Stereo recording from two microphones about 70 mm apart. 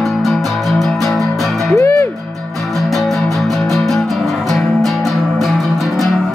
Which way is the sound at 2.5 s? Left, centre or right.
Centre.